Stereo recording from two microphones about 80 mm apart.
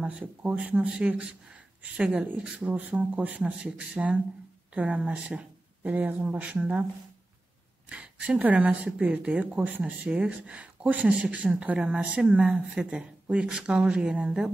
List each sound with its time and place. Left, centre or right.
0.0 s speech: centre
7.9 s speech: centre